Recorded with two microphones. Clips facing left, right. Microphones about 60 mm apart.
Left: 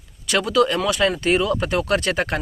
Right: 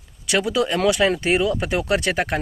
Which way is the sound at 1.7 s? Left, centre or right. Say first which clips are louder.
Even; centre.